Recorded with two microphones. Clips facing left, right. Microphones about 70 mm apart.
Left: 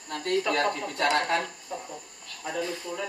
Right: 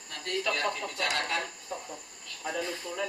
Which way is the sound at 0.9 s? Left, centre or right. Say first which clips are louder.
Left 6 dB; left.